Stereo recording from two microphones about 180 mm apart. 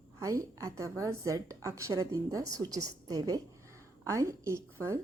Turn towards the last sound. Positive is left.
turn(degrees=-15)  # may be behind; listen again after turning